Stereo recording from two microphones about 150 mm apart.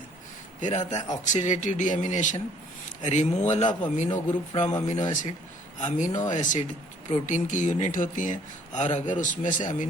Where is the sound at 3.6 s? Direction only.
30° left (ahead or behind).